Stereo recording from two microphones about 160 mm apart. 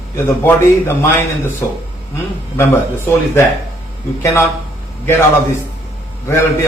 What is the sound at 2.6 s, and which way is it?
A man's voice, 15° left (ahead or behind).